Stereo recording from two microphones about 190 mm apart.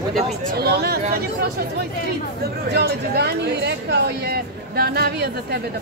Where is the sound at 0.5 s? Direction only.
55° right (ahead or behind).